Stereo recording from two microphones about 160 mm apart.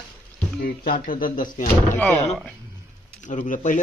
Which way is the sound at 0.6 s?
60° left (ahead or behind).